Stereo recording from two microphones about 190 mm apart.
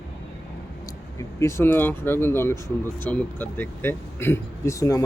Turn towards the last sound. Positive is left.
turn(degrees=15)  # may be behind; listen again after turning